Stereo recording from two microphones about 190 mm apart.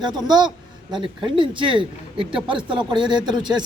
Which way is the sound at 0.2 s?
20° right (ahead or behind).